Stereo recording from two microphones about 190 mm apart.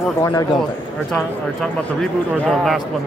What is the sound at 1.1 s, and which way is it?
Speech, centre (ahead or behind).